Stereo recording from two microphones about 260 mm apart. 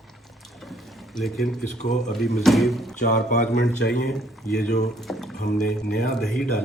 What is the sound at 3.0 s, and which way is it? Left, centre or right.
Speech, left.